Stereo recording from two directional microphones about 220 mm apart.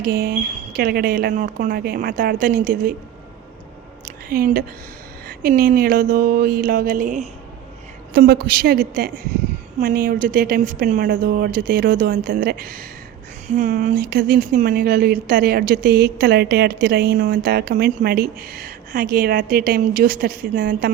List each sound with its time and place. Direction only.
0.0 s a woman's voice: 45° right (ahead or behind)
4.0 s a sound: 40° right (ahead or behind)
5.4 s a woman's voice: 40° right (ahead or behind)